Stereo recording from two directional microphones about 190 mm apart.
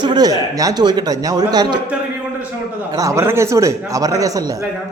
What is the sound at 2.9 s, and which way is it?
Speech, 15° right (ahead or behind).